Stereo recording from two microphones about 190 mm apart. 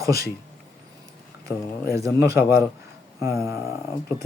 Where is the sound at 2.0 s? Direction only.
15° right (ahead or behind).